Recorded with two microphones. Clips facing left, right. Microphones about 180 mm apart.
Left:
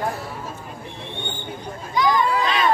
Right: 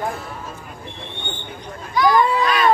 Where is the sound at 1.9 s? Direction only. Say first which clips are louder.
Right 4 dB; 20° left (ahead or behind).